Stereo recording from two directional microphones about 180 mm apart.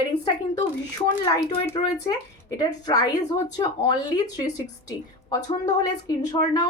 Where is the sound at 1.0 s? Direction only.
25° left (ahead or behind).